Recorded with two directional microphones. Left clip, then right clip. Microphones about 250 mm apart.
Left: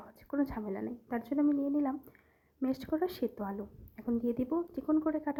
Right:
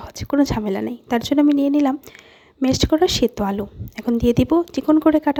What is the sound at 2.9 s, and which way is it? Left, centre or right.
Speech, right.